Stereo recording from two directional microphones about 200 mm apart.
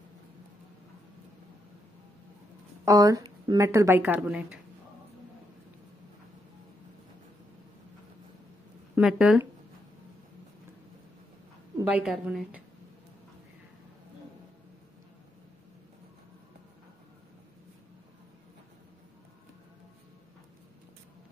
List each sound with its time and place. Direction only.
2.8 s a woman's voice: 15° right (ahead or behind)
8.9 s speech: 5° right (ahead or behind)
11.9 s a woman's voice: 5° right (ahead or behind)